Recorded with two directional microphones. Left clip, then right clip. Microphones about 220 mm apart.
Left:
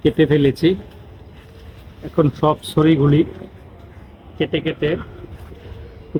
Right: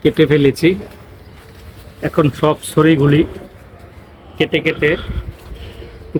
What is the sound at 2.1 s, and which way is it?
A man's voice, 15° right (ahead or behind).